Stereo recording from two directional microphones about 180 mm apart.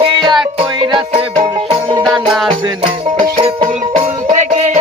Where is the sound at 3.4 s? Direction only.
35° right (ahead or behind).